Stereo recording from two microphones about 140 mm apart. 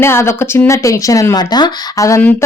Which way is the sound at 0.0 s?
20° left (ahead or behind).